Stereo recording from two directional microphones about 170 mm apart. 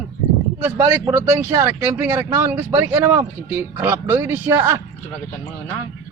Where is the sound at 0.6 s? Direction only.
15° right (ahead or behind).